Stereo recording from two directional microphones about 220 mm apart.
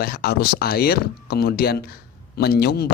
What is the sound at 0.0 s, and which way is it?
Speech, 45° left (ahead or behind).